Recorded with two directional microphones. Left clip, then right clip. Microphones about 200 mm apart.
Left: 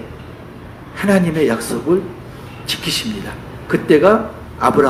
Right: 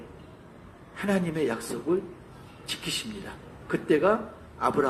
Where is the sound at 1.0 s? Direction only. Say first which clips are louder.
Left 12 dB; 15° right (ahead or behind).